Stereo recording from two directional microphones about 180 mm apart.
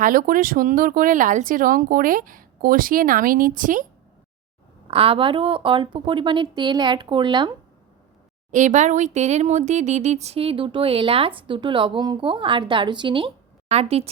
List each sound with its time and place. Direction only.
0.0 s speech: 50° right (ahead or behind)
4.9 s speech: 30° right (ahead or behind)
8.4 s speech: 45° right (ahead or behind)